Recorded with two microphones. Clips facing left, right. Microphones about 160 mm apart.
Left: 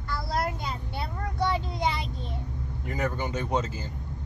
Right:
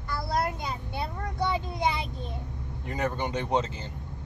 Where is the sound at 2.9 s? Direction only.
25° right (ahead or behind).